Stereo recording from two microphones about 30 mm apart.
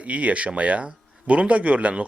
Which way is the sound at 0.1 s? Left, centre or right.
Right.